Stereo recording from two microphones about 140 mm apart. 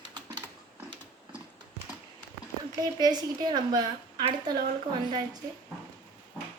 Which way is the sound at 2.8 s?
30° right (ahead or behind).